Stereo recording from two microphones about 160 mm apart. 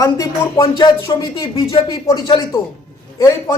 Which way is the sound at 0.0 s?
20° left (ahead or behind).